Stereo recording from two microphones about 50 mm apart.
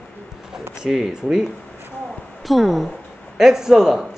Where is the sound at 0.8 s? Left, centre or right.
Centre.